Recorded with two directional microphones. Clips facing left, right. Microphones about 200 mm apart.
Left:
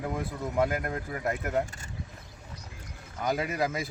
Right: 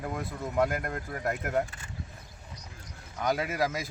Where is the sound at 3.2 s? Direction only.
Centre (ahead or behind).